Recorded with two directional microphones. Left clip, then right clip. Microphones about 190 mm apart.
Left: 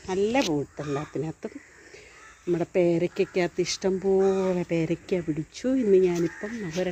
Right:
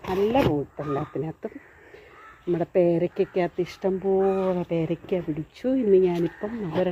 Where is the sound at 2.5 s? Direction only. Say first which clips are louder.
Right 2 dB; 5° left (ahead or behind).